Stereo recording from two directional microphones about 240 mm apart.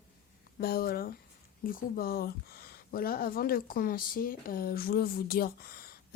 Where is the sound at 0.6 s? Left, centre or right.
Left.